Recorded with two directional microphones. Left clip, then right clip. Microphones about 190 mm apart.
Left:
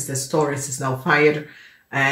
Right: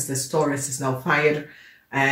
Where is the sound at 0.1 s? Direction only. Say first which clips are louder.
Left 2 dB; 35° left (ahead or behind).